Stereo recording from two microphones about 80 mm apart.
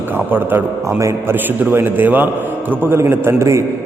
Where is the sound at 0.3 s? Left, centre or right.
Right.